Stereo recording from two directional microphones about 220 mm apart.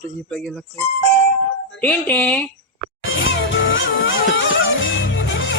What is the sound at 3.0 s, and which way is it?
Music, 60° left (ahead or behind).